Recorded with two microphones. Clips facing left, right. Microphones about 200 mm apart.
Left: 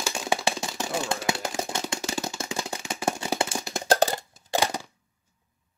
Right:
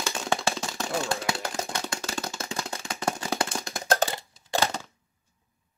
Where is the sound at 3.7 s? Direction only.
30° left (ahead or behind).